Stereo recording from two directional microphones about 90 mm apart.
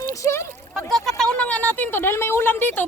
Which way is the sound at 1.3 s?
15° left (ahead or behind).